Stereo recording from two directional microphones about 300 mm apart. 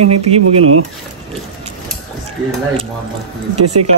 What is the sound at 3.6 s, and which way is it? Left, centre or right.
Speech, right.